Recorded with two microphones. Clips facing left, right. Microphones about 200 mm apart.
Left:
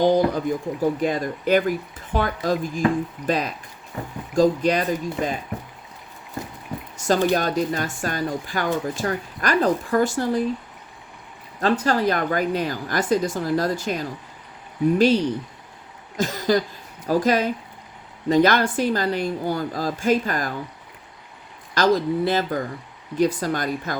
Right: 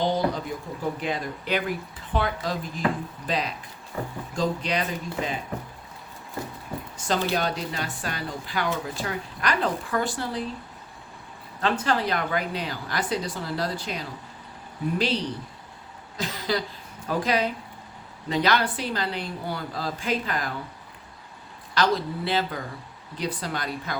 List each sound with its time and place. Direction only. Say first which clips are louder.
0.0 s speech: left 7 dB; 45° left (ahead or behind)
6.9 s speech: left 6 dB; 45° left (ahead or behind)
11.6 s speech: left 5 dB; 40° left (ahead or behind)
16.1 s a sound: left 7 dB; 45° left (ahead or behind)
17.1 s speech: left 5 dB; 45° left (ahead or behind)
21.8 s speech: left 5 dB; 45° left (ahead or behind)